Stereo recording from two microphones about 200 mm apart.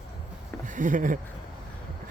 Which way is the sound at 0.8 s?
40° right (ahead or behind).